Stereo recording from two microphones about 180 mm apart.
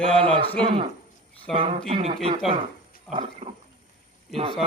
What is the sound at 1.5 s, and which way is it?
Speech, 30° right (ahead or behind).